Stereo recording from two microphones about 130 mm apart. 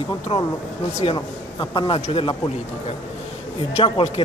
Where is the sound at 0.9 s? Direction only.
60° left (ahead or behind).